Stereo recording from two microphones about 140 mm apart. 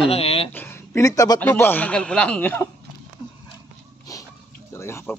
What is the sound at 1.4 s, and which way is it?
Speech, 10° left (ahead or behind).